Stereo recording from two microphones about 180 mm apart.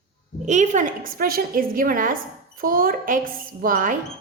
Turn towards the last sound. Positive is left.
turn(degrees=-50)  # may be behind; listen again after turning